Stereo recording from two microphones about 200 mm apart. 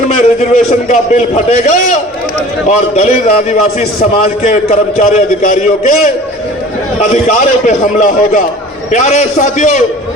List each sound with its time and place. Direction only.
0.2 s a man's voice: 35° left (ahead or behind)